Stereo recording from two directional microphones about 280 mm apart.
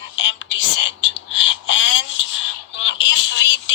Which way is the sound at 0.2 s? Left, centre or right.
Left.